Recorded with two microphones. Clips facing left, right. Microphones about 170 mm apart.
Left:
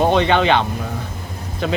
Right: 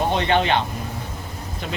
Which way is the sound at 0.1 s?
90° left.